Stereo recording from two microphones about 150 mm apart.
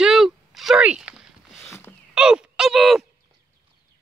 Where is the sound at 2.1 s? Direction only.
5° right (ahead or behind).